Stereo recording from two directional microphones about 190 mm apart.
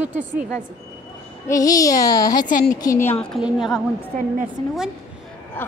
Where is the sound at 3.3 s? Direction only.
Centre (ahead or behind).